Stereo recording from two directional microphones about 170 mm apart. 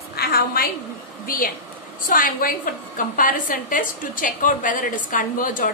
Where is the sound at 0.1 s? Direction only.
65° left (ahead or behind).